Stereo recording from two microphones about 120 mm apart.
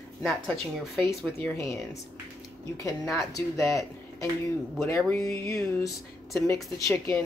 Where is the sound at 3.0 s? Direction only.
Centre (ahead or behind).